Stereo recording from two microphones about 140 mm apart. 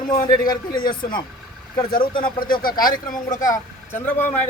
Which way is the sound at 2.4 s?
90° left.